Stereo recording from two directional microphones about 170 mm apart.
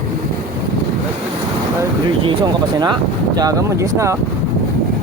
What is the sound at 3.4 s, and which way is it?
Speech, 20° right (ahead or behind).